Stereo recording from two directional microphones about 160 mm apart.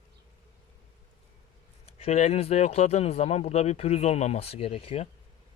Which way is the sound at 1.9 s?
40° left (ahead or behind).